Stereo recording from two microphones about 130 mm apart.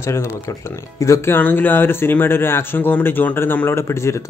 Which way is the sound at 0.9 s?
20° left (ahead or behind).